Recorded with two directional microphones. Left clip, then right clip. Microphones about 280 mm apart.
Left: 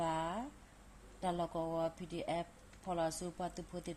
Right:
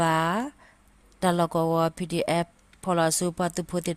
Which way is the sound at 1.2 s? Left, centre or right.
Right.